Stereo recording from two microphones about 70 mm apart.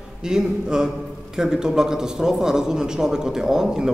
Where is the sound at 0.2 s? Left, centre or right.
Centre.